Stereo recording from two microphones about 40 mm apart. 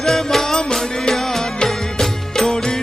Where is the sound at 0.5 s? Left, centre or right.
Centre.